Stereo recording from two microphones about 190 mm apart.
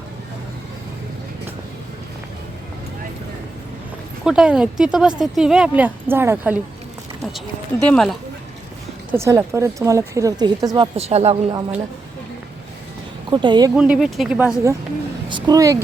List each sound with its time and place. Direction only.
4.2 s speech: 5° right (ahead or behind)
7.2 s speech: centre (ahead or behind)
9.1 s speech: 15° right (ahead or behind)
10.9 s a woman's voice: 35° right (ahead or behind)
13.3 s speech: 25° right (ahead or behind)
13.7 s speech: 5° right (ahead or behind)
15.3 s speech: 20° right (ahead or behind)